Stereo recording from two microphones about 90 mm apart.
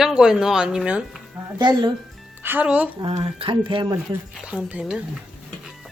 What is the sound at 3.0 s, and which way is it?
Speech, 75° right (ahead or behind).